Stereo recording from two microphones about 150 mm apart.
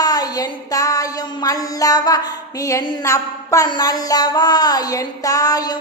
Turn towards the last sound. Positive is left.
turn(degrees=25)  # may be behind; listen again after turning